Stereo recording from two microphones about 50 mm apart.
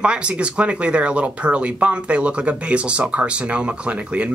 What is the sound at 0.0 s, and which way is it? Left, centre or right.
Speech, right.